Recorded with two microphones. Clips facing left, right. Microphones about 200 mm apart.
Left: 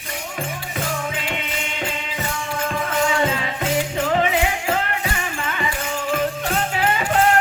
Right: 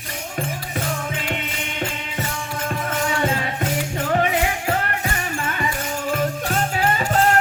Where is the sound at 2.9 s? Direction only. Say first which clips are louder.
Left 2 dB; 50° right (ahead or behind).